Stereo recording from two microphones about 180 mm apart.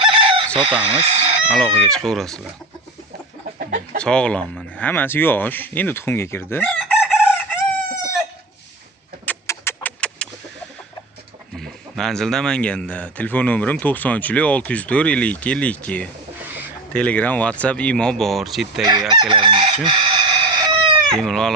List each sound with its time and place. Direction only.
0.0 s chicken: 30° right (ahead or behind)
1.5 s speech: 5° left (ahead or behind)
3.9 s speech: 5° left (ahead or behind)
9.2 s a sound: 10° left (ahead or behind)
11.5 s speech: centre (ahead or behind)
18.9 s chicken: 25° right (ahead or behind)
21.2 s speech: 5° left (ahead or behind)